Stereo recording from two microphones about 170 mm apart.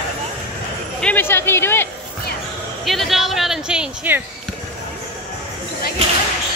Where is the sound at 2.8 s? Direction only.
Centre (ahead or behind).